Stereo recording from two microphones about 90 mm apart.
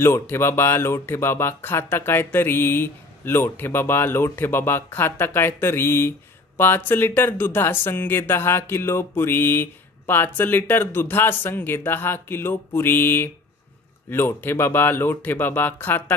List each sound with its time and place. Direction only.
0.0 s speech: 30° left (ahead or behind)